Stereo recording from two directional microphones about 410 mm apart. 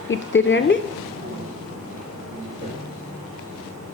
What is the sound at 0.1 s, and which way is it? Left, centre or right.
Speech, left.